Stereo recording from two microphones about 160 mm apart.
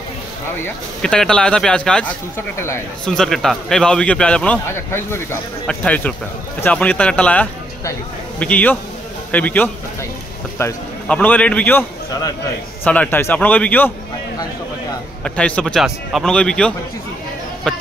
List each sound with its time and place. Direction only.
0.6 s a man's voice: 5° left (ahead or behind)
3.1 s a man's voice: 5° left (ahead or behind)
15.2 s a man's voice: 5° left (ahead or behind)